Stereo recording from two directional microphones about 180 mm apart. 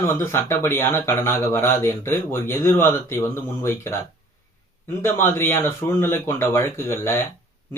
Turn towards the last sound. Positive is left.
turn(degrees=15)  # may be behind; listen again after turning